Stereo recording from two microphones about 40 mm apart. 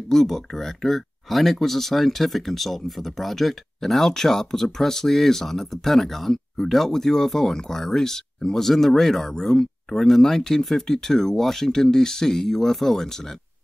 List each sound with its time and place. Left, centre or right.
0.1 s speech: centre